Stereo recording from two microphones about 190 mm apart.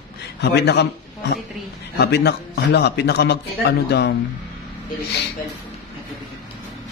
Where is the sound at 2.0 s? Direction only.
60° left (ahead or behind).